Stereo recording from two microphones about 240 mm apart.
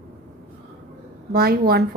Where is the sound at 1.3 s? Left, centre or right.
Right.